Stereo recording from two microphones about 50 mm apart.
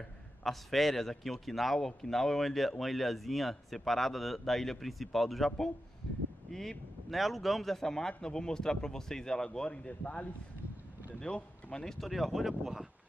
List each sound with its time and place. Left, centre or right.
0.4 s speech: centre
12.1 s speech: centre